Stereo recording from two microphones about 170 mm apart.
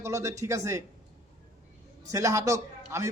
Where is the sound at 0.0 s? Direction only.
15° right (ahead or behind).